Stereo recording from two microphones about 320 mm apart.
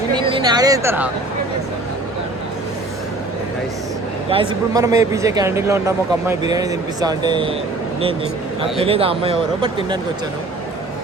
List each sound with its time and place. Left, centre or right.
0.1 s speech: centre
4.3 s speech: centre
8.8 s speech: centre